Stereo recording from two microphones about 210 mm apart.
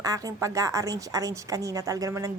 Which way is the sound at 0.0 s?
15° right (ahead or behind).